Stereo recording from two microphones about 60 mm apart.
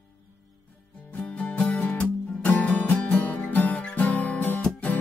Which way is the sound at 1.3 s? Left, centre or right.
Left.